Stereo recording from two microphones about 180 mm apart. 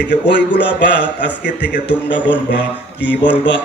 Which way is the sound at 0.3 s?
75° left (ahead or behind).